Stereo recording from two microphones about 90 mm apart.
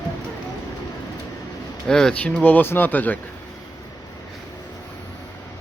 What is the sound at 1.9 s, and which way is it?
Speech, 10° left (ahead or behind).